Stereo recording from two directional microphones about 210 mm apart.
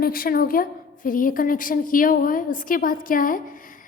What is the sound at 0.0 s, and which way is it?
A woman's voice, 45° left (ahead or behind).